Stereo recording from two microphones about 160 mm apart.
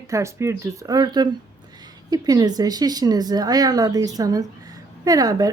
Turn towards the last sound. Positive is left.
turn(degrees=-20)  # may be behind; listen again after turning